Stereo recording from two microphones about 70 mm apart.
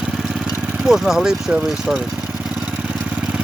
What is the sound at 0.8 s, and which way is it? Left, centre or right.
Speech, centre.